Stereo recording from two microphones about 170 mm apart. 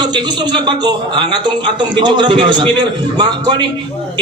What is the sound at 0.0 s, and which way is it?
A man's voice, 25° right (ahead or behind).